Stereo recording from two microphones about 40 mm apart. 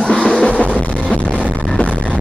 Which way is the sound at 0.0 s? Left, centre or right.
Left.